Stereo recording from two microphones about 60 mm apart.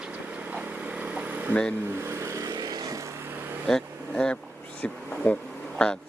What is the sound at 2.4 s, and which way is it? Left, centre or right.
Vehicle, right.